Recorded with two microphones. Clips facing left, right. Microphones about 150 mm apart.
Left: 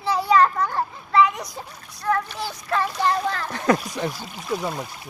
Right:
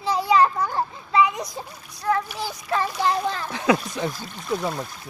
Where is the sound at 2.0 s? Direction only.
10° right (ahead or behind).